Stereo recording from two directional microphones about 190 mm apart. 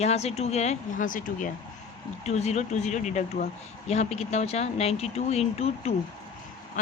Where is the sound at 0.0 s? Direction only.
35° left (ahead or behind).